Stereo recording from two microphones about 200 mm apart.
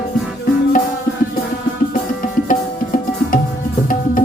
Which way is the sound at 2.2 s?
45° left (ahead or behind).